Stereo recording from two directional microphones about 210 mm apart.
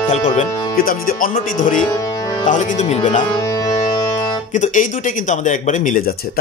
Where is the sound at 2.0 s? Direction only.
15° left (ahead or behind).